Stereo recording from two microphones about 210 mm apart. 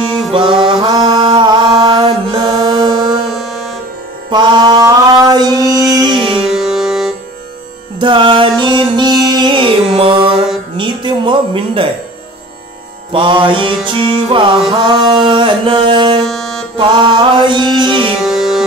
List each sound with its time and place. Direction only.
0.7 s mantra: 25° right (ahead or behind)
3.3 s music: centre (ahead or behind)
4.3 s mantra: 20° right (ahead or behind)
6.3 s music: centre (ahead or behind)
8.0 s music: 25° right (ahead or behind)
10.8 s a woman's voice: 20° right (ahead or behind)
13.1 s music: 25° right (ahead or behind)
16.2 s music: centre (ahead or behind)
16.7 s music: 25° right (ahead or behind)
18.2 s music: centre (ahead or behind)